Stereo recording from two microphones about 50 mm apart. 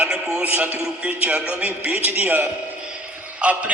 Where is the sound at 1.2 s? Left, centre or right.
Right.